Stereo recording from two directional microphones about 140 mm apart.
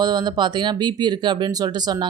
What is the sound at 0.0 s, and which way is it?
A woman's voice, 30° right (ahead or behind).